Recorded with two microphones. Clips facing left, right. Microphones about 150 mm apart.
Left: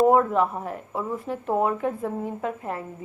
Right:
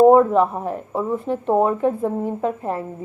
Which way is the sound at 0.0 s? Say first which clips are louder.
Right 6 dB; 30° right (ahead or behind).